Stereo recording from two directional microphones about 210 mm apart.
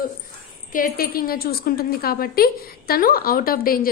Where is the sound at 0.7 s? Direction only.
45° left (ahead or behind).